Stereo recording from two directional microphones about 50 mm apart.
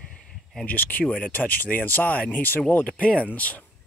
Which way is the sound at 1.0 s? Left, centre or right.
Left.